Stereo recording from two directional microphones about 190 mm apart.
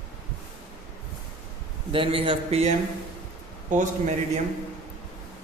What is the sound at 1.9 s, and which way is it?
A man's voice, 30° right (ahead or behind).